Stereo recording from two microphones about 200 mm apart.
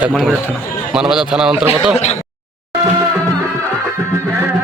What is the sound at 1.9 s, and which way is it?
Speech, 30° left (ahead or behind).